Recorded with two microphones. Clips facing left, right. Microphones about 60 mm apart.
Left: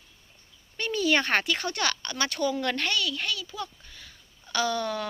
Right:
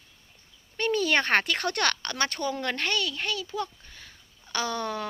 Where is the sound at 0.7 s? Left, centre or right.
Right.